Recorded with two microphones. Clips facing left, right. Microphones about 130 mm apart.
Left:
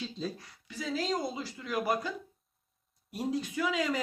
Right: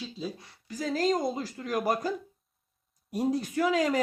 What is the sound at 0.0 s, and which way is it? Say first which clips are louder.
Speech: even; 10° right (ahead or behind).